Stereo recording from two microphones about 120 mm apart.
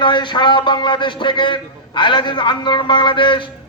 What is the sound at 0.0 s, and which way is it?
A man's voice, 40° left (ahead or behind).